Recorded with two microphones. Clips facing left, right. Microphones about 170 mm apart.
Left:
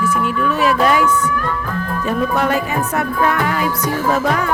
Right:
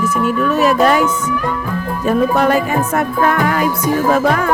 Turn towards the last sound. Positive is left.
turn(degrees=-50)  # may be behind; listen again after turning